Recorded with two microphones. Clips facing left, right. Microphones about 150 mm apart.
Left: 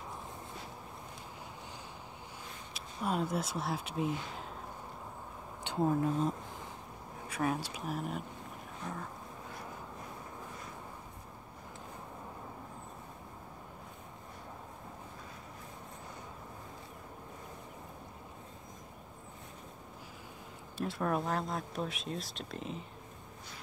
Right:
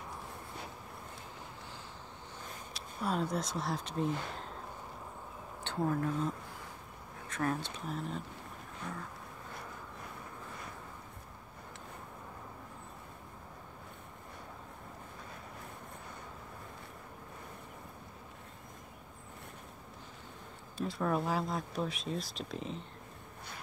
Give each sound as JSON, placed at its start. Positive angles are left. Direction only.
{"t": 2.7, "sound": "speech", "side_deg": 5}
{"t": 5.6, "sound": "speech", "side_deg": 15}
{"t": 7.2, "sound": "speech", "side_deg": 10}
{"t": 20.7, "sound": "speech", "side_deg": 0}